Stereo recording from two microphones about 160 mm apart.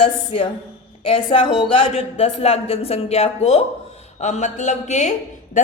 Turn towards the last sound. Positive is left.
turn(degrees=55)  # may be behind; listen again after turning